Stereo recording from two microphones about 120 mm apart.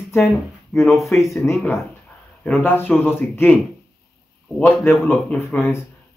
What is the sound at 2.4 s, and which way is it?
A man's voice, 15° left (ahead or behind).